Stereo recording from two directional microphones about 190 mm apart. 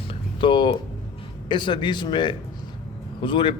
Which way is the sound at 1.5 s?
25° left (ahead or behind).